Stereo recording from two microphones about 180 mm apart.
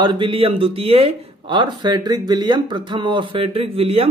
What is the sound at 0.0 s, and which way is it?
Speech, 25° right (ahead or behind).